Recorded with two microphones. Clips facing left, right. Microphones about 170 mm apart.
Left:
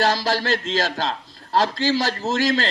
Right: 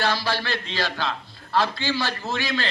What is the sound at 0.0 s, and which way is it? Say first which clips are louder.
A man's voice: left 4 dB; 40° left (ahead or behind).